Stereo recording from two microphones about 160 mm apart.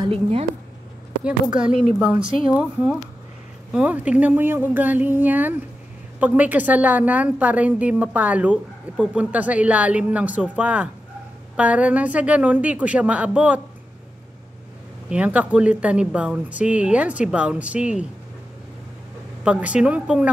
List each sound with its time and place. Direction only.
0.0 s a woman's voice: 35° right (ahead or behind)
1.2 s a woman's voice: 5° right (ahead or behind)
15.0 s a woman's voice: 10° right (ahead or behind)
19.4 s a woman's voice: 10° right (ahead or behind)